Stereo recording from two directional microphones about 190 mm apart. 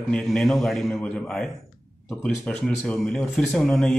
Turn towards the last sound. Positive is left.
turn(degrees=5)  # may be behind; listen again after turning